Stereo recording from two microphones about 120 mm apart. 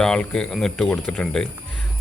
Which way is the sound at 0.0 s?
5° left (ahead or behind).